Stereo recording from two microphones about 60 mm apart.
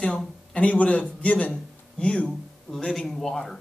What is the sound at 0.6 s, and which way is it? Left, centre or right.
Speech, left.